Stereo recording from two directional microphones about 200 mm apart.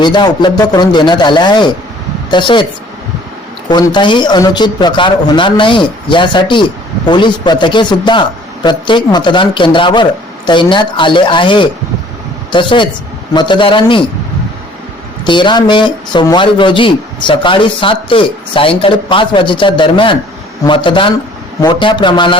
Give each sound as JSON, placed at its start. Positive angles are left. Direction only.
{"t": 0.0, "sound": "speech", "side_deg": 20}
{"t": 3.7, "sound": "a man's voice", "side_deg": 20}
{"t": 15.3, "sound": "speech", "side_deg": 25}